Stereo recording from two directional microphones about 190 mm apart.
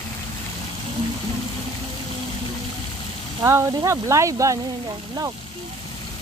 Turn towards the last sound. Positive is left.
turn(degrees=-15)  # may be behind; listen again after turning